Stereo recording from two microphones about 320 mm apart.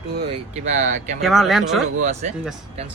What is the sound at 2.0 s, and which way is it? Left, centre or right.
Speech, right.